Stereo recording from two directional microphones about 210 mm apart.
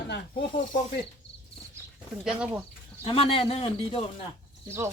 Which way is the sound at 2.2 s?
5° right (ahead or behind).